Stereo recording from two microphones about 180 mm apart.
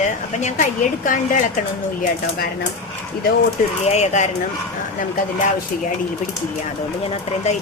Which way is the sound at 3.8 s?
40° left (ahead or behind).